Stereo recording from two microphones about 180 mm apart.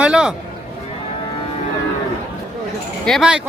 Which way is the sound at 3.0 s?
Centre (ahead or behind).